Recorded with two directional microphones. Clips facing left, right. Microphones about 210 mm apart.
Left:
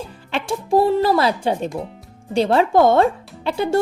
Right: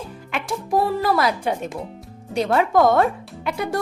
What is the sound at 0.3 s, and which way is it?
Speech, 30° left (ahead or behind).